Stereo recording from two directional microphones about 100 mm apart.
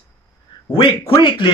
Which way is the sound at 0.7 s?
60° left (ahead or behind).